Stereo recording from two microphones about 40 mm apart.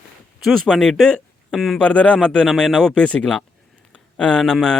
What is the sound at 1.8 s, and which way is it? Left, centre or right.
Speech, left.